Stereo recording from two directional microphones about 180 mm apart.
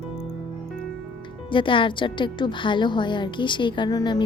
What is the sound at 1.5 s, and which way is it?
A woman's voice, 30° left (ahead or behind).